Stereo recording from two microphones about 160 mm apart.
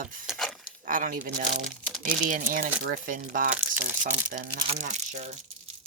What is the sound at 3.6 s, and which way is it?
Crumpling, 10° right (ahead or behind).